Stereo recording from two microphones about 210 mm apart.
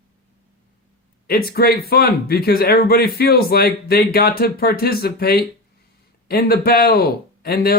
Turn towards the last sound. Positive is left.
turn(degrees=45)  # may be behind; listen again after turning